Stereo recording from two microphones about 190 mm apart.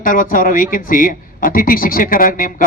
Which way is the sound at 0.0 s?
45° left (ahead or behind).